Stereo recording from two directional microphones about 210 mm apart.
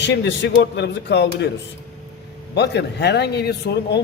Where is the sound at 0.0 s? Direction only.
55° left (ahead or behind).